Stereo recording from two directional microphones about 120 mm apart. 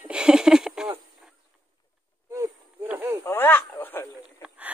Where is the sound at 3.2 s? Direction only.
20° left (ahead or behind).